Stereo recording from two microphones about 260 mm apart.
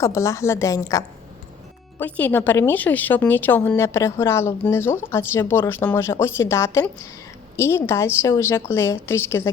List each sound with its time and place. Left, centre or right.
0.0 s a woman's voice: centre